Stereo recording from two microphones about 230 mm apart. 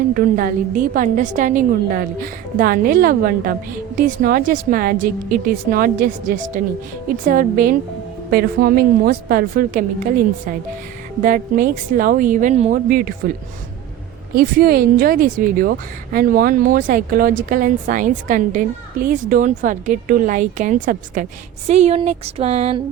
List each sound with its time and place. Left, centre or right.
0.1 s speech: right
14.3 s speech: right